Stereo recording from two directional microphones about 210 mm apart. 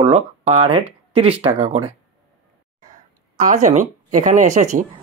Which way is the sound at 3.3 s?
35° right (ahead or behind).